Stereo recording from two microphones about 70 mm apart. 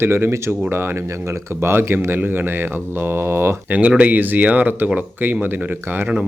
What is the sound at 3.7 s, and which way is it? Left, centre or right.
Speech, right.